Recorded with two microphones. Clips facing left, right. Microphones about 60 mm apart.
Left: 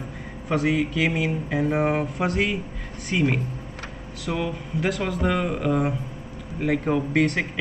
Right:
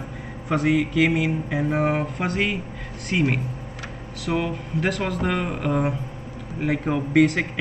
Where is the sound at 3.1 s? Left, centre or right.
Centre.